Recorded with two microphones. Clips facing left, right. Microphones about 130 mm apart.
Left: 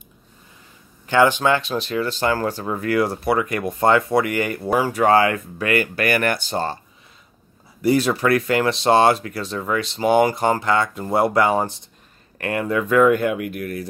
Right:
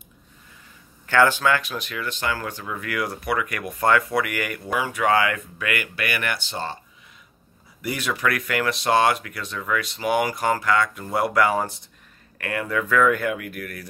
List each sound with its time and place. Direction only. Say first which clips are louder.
1.0 s speech: left 3 dB; 20° left (ahead or behind); by 6.8 s 45° left (ahead or behind)
7.8 s speech: left 8 dB; 35° left (ahead or behind)